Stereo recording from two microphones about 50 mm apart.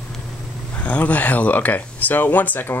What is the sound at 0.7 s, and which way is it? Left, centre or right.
Speech, left.